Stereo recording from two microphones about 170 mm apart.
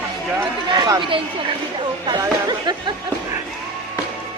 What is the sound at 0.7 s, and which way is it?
Speech, 25° right (ahead or behind).